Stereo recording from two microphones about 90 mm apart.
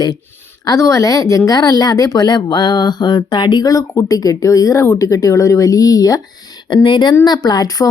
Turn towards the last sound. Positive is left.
turn(degrees=40)  # may be behind; listen again after turning